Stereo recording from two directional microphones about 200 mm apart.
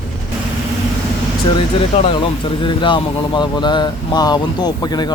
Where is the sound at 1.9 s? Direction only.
30° left (ahead or behind).